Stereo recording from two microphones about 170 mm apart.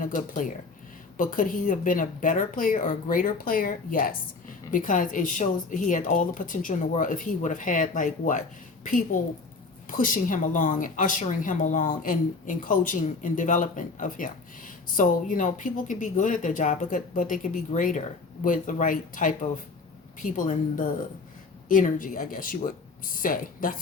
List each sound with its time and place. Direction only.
0.0 s speech: 50° left (ahead or behind)